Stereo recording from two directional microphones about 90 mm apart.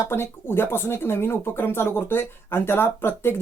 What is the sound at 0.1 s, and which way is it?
Speech, 25° left (ahead or behind).